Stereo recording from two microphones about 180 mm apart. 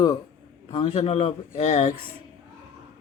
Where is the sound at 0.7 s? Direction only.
30° left (ahead or behind).